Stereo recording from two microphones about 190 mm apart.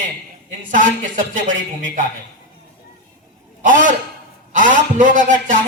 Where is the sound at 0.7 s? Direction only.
45° right (ahead or behind).